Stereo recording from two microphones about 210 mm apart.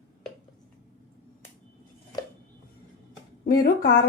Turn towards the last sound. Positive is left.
turn(degrees=45)  # may be behind; listen again after turning